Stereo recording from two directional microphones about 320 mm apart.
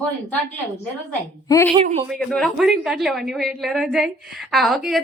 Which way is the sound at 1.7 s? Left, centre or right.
Centre.